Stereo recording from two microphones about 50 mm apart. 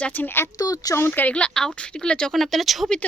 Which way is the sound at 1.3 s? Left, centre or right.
Left.